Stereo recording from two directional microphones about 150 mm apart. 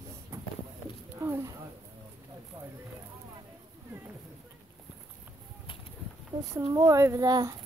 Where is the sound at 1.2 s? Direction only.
20° right (ahead or behind).